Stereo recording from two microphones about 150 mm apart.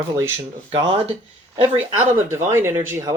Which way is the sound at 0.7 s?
35° right (ahead or behind).